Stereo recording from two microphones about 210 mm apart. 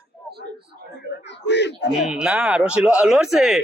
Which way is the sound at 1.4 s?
55° left (ahead or behind).